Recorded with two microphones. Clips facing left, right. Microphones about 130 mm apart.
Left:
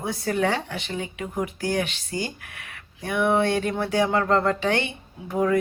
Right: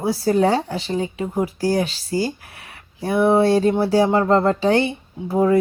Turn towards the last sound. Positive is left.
turn(degrees=-30)  # may be behind; listen again after turning